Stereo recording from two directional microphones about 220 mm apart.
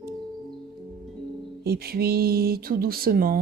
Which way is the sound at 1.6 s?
45° right (ahead or behind).